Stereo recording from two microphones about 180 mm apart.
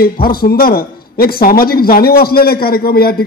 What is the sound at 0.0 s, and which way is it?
A man's voice, 55° left (ahead or behind).